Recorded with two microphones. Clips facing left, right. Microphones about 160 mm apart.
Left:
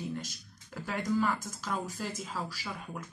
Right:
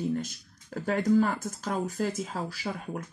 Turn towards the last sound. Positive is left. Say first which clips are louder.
# right 6 dB
turn(degrees=-50)  # may be behind; listen again after turning